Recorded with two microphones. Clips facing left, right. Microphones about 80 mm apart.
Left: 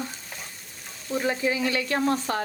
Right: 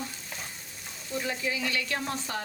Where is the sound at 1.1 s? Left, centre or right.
Left.